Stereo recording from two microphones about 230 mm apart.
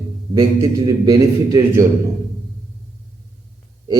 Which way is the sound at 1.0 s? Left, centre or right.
Centre.